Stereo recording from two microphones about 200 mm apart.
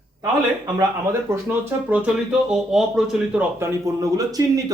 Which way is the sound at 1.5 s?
5° right (ahead or behind).